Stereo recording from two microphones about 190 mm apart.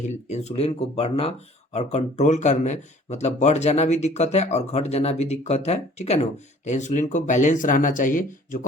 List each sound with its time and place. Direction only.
0.3 s speech: 35° left (ahead or behind)